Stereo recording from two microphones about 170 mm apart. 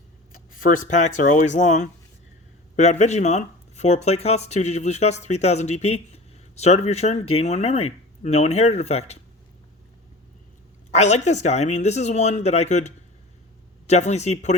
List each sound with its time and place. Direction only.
0.6 s speech: 50° left (ahead or behind)
10.9 s speech: 40° left (ahead or behind)